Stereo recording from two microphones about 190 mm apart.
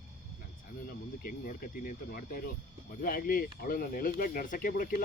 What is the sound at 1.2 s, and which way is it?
Speech, 45° left (ahead or behind).